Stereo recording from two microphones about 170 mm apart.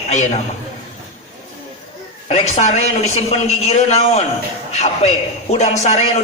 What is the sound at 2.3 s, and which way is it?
A man's voice, 40° left (ahead or behind).